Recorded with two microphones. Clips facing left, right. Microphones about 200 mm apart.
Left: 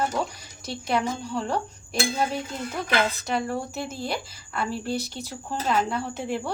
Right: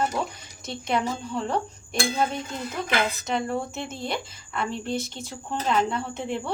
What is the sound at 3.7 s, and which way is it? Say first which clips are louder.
Speech: left 1 dB; 5° left (ahead or behind).